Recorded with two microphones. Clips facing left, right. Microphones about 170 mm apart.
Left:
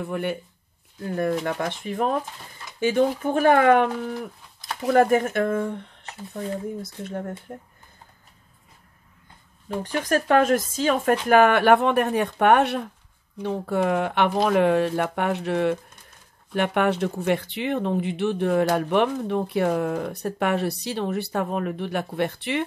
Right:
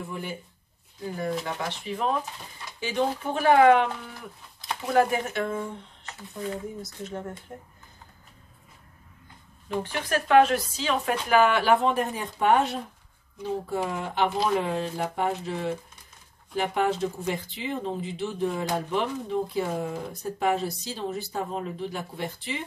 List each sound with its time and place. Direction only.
0.0 s speech: 65° left (ahead or behind)
6.8 s speech: 55° left (ahead or behind)
9.8 s speech: 45° left (ahead or behind); by 22.7 s 65° left (ahead or behind)